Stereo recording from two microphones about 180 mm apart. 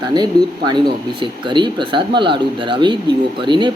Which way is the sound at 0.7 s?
25° right (ahead or behind).